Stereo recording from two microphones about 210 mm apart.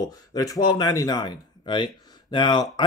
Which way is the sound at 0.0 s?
20° left (ahead or behind).